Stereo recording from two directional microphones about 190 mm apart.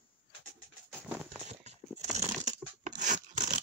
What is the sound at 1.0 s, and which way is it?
Clip-clop, 5° right (ahead or behind).